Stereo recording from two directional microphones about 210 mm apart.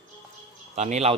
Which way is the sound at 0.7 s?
30° right (ahead or behind).